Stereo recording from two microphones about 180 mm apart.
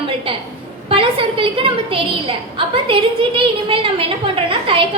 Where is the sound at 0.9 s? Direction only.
30° right (ahead or behind).